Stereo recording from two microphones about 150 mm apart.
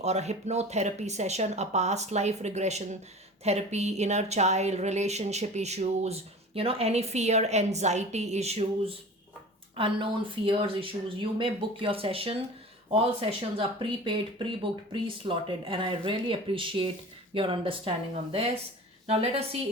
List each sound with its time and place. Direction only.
0.0 s a woman's voice: 45° right (ahead or behind)